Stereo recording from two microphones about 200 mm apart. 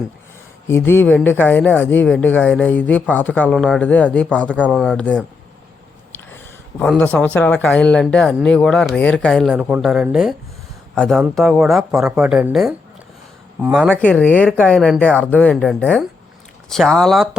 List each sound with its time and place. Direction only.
0.7 s speech: 10° left (ahead or behind); by 13.9 s 5° right (ahead or behind)
13.9 s speech: 5° left (ahead or behind)
15.2 s speech: 5° left (ahead or behind)